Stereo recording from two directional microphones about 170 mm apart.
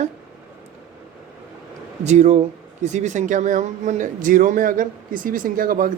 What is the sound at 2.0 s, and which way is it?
A man's voice, 40° right (ahead or behind).